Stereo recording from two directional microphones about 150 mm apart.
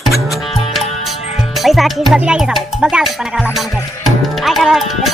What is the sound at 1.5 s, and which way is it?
Speech, centre (ahead or behind).